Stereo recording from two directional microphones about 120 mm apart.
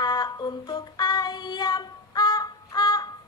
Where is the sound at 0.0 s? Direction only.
35° left (ahead or behind).